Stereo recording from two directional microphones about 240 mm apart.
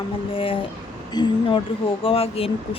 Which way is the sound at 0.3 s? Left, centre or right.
Left.